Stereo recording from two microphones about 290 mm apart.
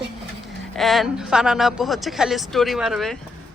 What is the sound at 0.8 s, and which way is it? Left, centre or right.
Speech, centre.